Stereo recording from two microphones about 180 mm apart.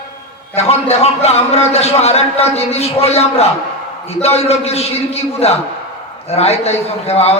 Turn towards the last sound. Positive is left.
turn(degrees=35)  # may be behind; listen again after turning